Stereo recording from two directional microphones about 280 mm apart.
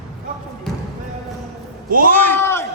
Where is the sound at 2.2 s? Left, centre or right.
Centre.